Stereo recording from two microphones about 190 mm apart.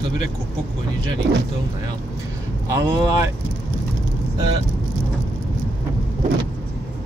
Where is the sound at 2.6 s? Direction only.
15° right (ahead or behind).